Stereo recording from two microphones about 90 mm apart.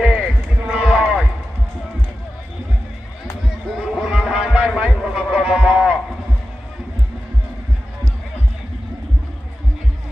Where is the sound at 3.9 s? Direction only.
5° right (ahead or behind).